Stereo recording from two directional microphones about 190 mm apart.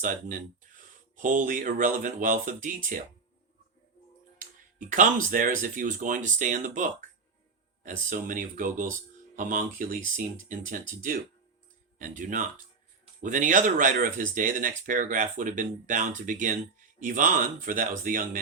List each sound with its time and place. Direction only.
0.8 s speech: 45° right (ahead or behind)
4.9 s speech: 45° right (ahead or behind)